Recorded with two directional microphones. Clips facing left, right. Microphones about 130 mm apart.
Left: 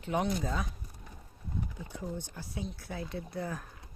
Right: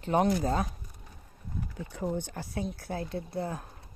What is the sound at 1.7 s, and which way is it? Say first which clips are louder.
Speech: right 6 dB; 70° right (ahead or behind).